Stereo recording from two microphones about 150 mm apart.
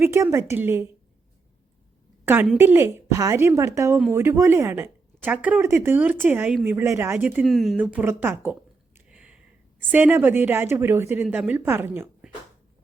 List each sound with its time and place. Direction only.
0.0 s speech: 20° right (ahead or behind)
2.2 s speech: 15° right (ahead or behind)
7.4 s speech: centre (ahead or behind)
9.0 s a sound: 5° right (ahead or behind)
9.9 s speech: 15° right (ahead or behind)